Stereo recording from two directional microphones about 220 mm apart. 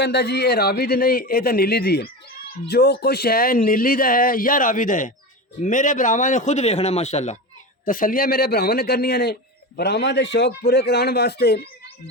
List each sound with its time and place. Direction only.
0.0 s a man's voice: 50° left (ahead or behind)